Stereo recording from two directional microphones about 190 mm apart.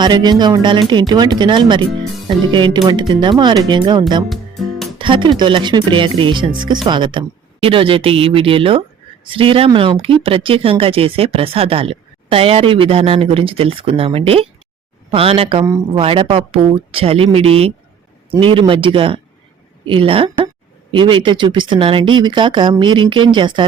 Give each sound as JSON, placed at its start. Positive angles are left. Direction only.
{"t": 0.0, "sound": "speech", "side_deg": -20}
{"t": 4.3, "sound": "music", "side_deg": 0}
{"t": 4.9, "sound": "music", "side_deg": -25}
{"t": 5.4, "sound": "speech", "side_deg": -25}